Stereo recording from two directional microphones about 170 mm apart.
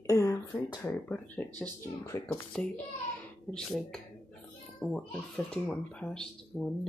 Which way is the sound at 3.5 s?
5° left (ahead or behind).